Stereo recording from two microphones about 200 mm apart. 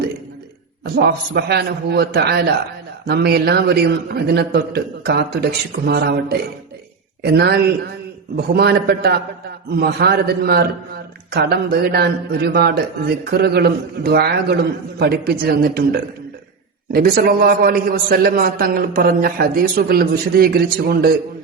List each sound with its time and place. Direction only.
0.9 s a man's voice: 55° right (ahead or behind)